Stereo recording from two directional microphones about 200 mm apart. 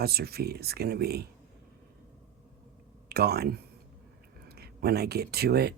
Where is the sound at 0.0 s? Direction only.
50° right (ahead or behind).